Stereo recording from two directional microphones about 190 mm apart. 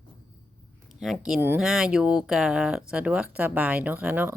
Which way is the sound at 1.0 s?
Centre (ahead or behind).